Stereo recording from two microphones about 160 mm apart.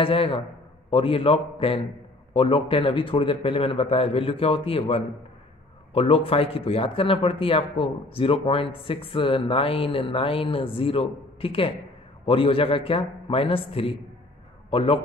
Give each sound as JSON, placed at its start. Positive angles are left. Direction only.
{"t": 0.0, "sound": "a man's voice", "side_deg": 35}